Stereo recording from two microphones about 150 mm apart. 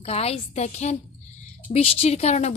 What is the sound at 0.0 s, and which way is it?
A woman's voice, 40° left (ahead or behind).